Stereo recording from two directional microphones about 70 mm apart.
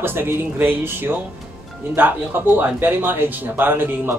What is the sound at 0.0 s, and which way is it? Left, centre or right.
A man's voice, right.